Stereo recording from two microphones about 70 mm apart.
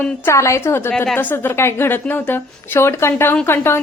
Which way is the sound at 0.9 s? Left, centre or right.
Centre.